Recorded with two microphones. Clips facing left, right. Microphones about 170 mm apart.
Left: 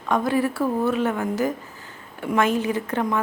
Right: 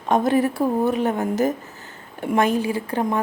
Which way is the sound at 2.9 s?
10° right (ahead or behind).